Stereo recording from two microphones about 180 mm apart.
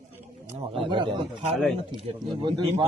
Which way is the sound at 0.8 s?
30° right (ahead or behind).